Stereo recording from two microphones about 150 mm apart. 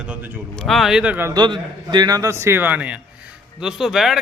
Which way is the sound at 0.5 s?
Centre (ahead or behind).